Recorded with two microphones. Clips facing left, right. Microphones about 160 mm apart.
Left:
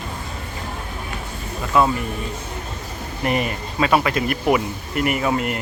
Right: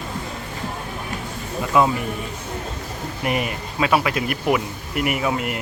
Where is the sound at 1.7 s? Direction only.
15° right (ahead or behind).